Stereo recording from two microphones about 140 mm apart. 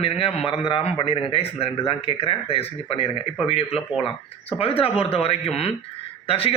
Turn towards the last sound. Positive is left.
turn(degrees=45)  # may be behind; listen again after turning